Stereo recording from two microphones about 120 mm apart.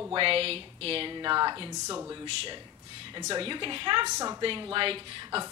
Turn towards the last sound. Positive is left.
turn(degrees=-45)  # may be behind; listen again after turning